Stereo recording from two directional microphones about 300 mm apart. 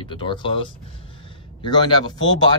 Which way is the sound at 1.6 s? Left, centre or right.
Centre.